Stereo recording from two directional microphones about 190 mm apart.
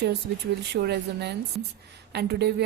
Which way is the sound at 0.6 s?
60° right (ahead or behind).